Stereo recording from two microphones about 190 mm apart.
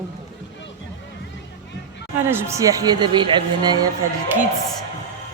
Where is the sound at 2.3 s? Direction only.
15° right (ahead or behind).